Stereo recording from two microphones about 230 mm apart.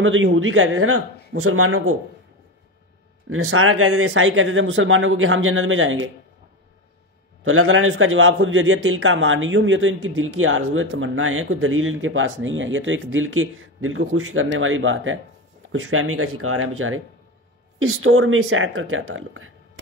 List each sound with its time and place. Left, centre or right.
0.0 s a man's voice: right
3.3 s a man's voice: right
7.4 s a man's voice: right